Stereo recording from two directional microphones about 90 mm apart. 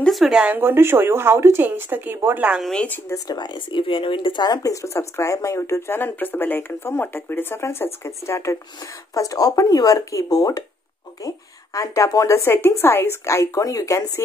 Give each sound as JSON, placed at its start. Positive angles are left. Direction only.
{"t": 0.0, "sound": "speech", "side_deg": 0}
{"t": 0.6, "sound": "speech", "side_deg": -25}
{"t": 2.7, "sound": "speech", "side_deg": 15}
{"t": 3.3, "sound": "speech", "side_deg": 55}
{"t": 9.1, "sound": "speech", "side_deg": 40}